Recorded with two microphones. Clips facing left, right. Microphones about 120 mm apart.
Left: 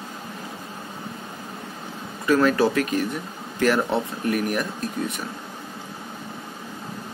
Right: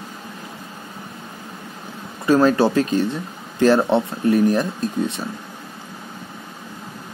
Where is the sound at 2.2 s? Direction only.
30° right (ahead or behind).